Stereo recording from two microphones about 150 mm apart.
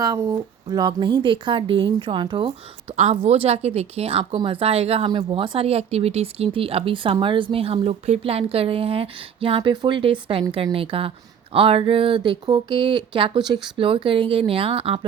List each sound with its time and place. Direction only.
0.0 s speech: 20° right (ahead or behind)
2.9 s speech: 45° right (ahead or behind)